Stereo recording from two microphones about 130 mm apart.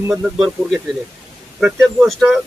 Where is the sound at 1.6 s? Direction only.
5° right (ahead or behind).